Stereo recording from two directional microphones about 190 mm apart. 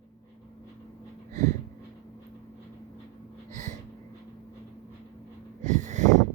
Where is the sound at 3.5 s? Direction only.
40° right (ahead or behind).